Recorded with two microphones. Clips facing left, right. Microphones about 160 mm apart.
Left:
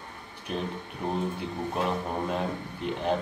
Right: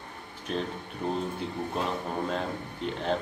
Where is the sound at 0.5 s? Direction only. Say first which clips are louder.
Right 1 dB; 5° left (ahead or behind).